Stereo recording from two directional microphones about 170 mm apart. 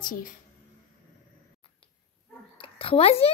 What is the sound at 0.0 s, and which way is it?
Speech, 55° left (ahead or behind).